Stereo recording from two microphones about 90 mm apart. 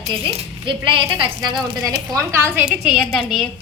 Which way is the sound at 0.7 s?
70° right (ahead or behind).